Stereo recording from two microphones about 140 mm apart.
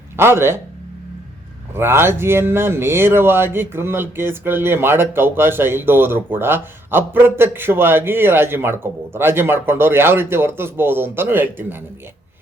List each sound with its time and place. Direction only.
0.2 s speech: 15° right (ahead or behind)
1.7 s speech: 15° right (ahead or behind)